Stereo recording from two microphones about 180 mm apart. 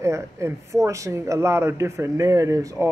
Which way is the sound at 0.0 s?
15° right (ahead or behind).